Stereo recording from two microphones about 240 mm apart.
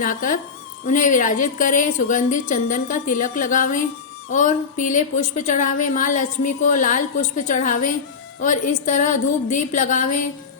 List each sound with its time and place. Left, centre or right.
0.0 s a woman's voice: left